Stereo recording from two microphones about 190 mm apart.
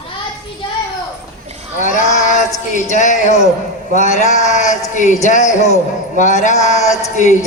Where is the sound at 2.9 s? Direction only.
40° left (ahead or behind).